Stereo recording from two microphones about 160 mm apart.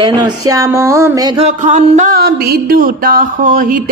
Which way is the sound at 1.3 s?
45° right (ahead or behind).